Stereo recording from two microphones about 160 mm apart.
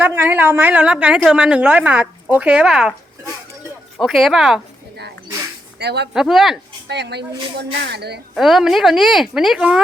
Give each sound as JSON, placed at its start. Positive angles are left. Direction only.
{"t": 0.0, "sound": "a woman's voice", "side_deg": -10}
{"t": 5.8, "sound": "speech", "side_deg": -90}
{"t": 6.1, "sound": "a woman's voice", "side_deg": 0}
{"t": 6.8, "sound": "speech", "side_deg": -90}
{"t": 8.4, "sound": "a woman's voice", "side_deg": 0}